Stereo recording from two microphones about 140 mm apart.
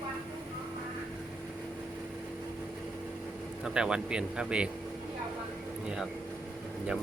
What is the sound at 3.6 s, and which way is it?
Speech, 5° right (ahead or behind).